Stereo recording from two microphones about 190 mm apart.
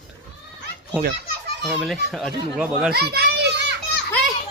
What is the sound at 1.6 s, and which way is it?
A child's voice, centre (ahead or behind).